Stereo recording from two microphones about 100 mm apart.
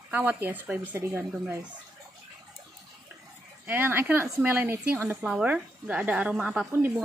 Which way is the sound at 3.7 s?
20° right (ahead or behind).